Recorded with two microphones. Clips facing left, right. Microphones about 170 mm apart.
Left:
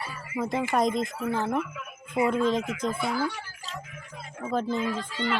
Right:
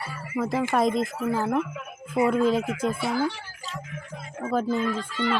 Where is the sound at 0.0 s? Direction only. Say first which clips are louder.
Right 3 dB; 20° left (ahead or behind).